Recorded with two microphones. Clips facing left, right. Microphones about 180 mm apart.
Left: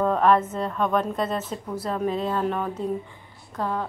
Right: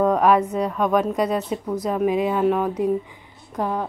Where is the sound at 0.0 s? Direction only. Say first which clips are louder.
Right 3 dB; 10° right (ahead or behind).